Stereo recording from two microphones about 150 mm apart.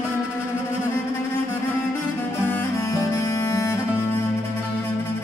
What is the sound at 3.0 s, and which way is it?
Music, 20° left (ahead or behind).